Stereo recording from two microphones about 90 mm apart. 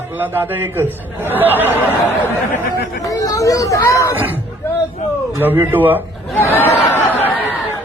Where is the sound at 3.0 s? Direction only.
45° left (ahead or behind).